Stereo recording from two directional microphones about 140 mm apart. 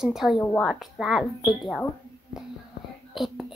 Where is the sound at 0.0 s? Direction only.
5° right (ahead or behind).